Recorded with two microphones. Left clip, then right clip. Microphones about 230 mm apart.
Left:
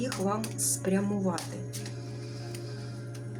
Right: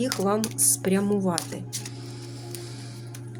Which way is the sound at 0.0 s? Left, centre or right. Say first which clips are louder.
Right 6 dB; right.